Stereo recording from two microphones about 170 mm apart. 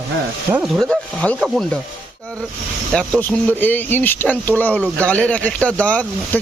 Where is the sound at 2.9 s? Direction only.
10° left (ahead or behind).